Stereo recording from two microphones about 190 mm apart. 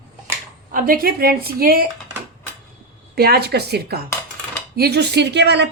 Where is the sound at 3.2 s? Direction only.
55° right (ahead or behind).